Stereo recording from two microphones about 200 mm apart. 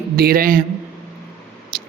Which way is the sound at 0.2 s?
45° right (ahead or behind).